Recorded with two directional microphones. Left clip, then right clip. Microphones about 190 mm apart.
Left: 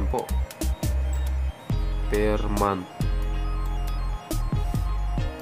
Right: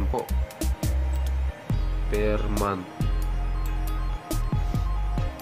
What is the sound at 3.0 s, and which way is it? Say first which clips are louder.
Music: even; centre (ahead or behind).